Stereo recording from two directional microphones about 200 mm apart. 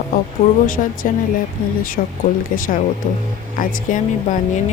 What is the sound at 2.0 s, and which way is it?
Speech, 40° left (ahead or behind).